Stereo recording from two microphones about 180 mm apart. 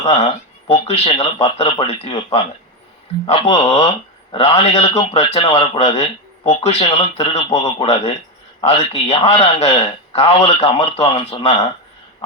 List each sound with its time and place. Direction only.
0.7 s a man's voice: 35° left (ahead or behind)